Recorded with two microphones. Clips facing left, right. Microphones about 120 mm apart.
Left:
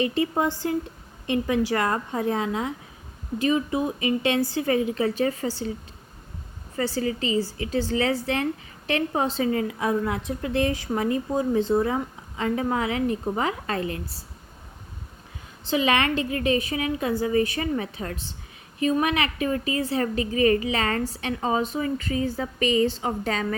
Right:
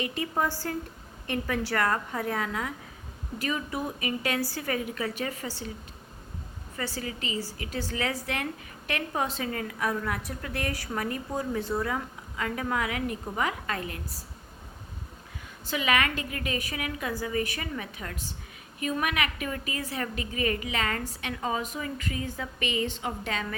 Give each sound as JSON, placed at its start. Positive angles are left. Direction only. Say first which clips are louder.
{"t": 0.0, "sound": "a woman's voice", "louder": "left 8 dB", "side_deg": 30}
{"t": 0.3, "sound": "a woman's voice", "louder": "left 5 dB", "side_deg": 20}
{"t": 6.7, "sound": "a woman's voice", "louder": "left 9 dB", "side_deg": 30}
{"t": 15.6, "sound": "a woman's voice", "louder": "left 5 dB", "side_deg": 30}